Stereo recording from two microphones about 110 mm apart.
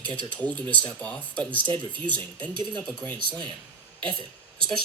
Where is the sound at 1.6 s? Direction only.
45° right (ahead or behind).